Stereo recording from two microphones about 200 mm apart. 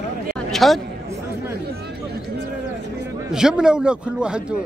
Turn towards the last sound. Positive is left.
turn(degrees=-5)  # may be behind; listen again after turning